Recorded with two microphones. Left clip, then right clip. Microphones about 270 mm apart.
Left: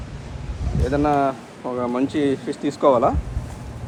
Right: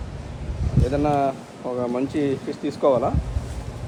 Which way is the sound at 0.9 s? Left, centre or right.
Left.